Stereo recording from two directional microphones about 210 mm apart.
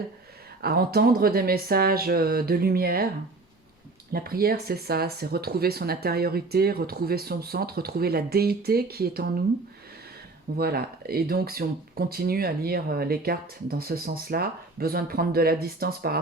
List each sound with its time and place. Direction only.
0.6 s speech: 45° right (ahead or behind)
4.1 s speech: 45° right (ahead or behind)
10.6 s speech: 45° right (ahead or behind)